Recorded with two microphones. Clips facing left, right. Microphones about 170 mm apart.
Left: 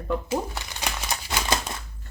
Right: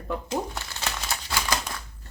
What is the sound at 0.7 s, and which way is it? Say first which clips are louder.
Crumpling: left 3 dB; 15° left (ahead or behind).